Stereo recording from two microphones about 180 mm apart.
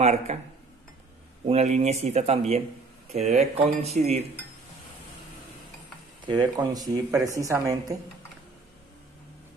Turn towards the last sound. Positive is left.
turn(degrees=-20)  # may be behind; listen again after turning